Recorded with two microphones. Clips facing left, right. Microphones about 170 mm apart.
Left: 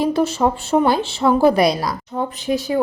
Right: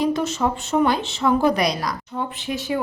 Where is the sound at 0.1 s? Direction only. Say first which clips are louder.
Left 4 dB; 35° left (ahead or behind).